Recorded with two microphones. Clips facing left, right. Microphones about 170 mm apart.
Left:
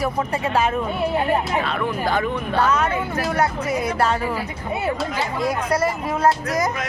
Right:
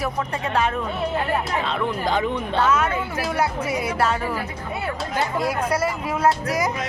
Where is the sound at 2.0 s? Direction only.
20° right (ahead or behind).